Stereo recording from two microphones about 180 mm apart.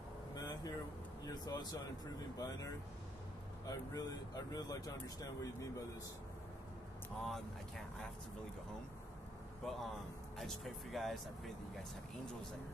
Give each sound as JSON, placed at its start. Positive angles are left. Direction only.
{"t": 0.3, "sound": "vehicle", "side_deg": 20}
{"t": 1.2, "sound": "speech", "side_deg": 20}
{"t": 7.2, "sound": "speech", "side_deg": 0}
{"t": 9.6, "sound": "speech", "side_deg": 0}